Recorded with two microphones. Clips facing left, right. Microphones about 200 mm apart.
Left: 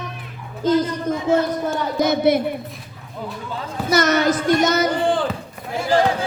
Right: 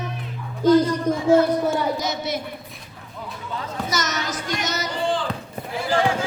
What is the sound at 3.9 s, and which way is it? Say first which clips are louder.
Speech: left 13 dB; 60° left (ahead or behind).